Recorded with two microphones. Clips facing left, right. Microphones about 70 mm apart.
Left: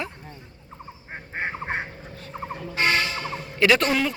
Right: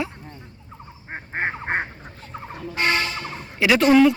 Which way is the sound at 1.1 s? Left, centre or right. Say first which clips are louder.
Right 4 dB; right.